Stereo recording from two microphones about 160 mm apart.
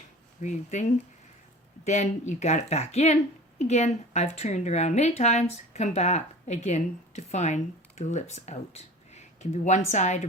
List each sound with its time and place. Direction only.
0.4 s a woman's voice: 50° left (ahead or behind)